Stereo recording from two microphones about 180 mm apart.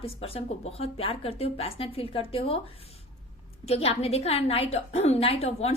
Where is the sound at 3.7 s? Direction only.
35° left (ahead or behind).